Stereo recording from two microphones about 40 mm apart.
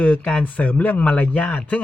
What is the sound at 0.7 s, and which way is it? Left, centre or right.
Speech, left.